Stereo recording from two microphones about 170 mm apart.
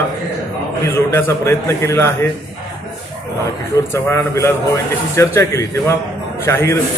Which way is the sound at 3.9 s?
15° left (ahead or behind).